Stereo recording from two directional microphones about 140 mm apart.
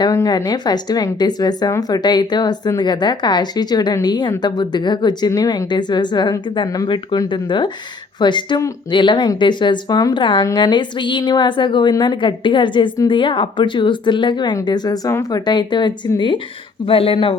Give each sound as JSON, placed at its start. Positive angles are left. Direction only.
{"t": 0.0, "sound": "speech", "side_deg": 25}